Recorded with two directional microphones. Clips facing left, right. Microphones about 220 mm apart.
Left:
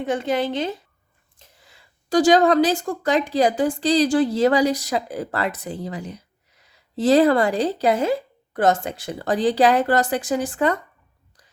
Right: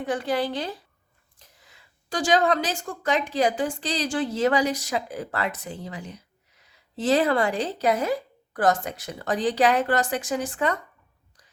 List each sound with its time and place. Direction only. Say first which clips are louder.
0.0 s a woman's voice: left 3 dB; 25° left (ahead or behind)